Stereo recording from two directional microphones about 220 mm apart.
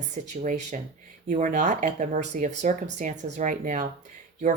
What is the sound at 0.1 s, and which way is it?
Speech, 35° right (ahead or behind).